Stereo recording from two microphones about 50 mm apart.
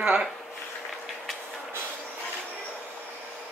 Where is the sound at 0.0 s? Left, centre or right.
Centre.